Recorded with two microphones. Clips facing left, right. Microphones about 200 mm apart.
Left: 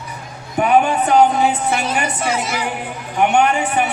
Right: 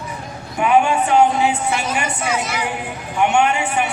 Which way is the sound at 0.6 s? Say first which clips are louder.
Left 1 dB; 40° left (ahead or behind).